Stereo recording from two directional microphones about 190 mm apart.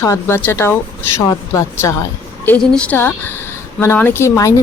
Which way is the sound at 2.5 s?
5° left (ahead or behind).